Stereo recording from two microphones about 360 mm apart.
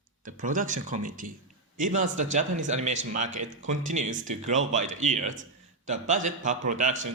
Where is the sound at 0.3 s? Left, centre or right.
Right.